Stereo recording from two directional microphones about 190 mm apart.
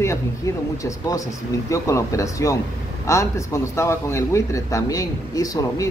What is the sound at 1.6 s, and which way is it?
Speech, 15° left (ahead or behind).